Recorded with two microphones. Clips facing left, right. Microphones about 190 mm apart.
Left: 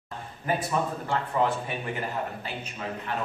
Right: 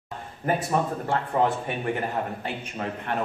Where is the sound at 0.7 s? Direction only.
50° right (ahead or behind).